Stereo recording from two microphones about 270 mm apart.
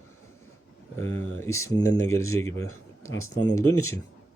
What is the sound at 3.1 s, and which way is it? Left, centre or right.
Speech, left.